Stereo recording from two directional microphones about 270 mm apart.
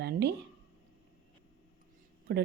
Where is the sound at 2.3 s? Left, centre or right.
Right.